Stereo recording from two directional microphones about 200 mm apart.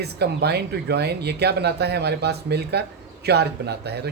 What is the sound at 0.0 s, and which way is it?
Speech, 55° right (ahead or behind).